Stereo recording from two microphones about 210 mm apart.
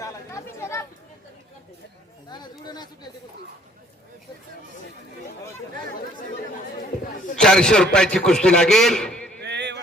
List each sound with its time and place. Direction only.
0.0 s chatter: 15° left (ahead or behind)
2.3 s chatter: 20° left (ahead or behind)
7.3 s a man's voice: 5° left (ahead or behind)
9.4 s a sound: 55° right (ahead or behind)